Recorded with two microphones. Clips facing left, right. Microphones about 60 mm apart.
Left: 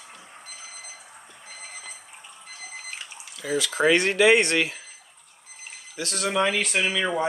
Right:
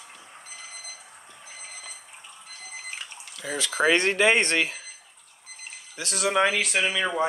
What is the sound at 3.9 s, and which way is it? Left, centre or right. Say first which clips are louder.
Speech: left 3 dB; right.